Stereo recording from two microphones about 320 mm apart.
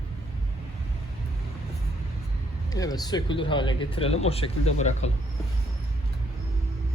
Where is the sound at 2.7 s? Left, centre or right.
Centre.